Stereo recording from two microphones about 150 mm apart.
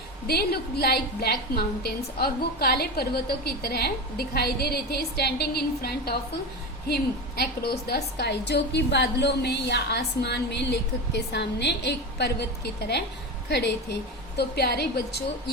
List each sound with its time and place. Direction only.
0.3 s a woman's voice: 90° left